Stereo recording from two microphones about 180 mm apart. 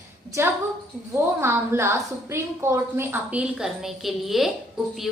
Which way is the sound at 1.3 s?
15° right (ahead or behind).